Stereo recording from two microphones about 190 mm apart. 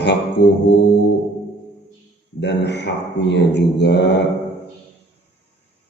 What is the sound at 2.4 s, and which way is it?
A man's voice, 65° left (ahead or behind).